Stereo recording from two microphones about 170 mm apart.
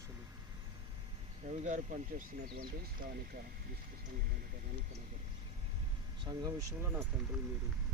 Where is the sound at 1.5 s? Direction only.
45° right (ahead or behind).